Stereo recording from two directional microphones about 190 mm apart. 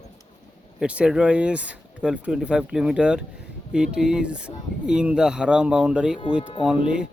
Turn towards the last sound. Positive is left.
turn(degrees=-5)  # may be behind; listen again after turning